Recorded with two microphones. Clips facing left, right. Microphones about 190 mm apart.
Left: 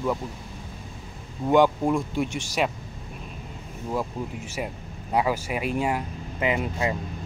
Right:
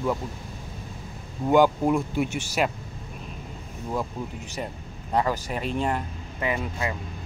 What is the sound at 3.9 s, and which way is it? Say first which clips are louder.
Speech: left 1 dB; 5° left (ahead or behind).